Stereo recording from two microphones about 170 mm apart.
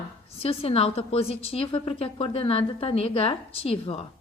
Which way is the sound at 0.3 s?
35° left (ahead or behind).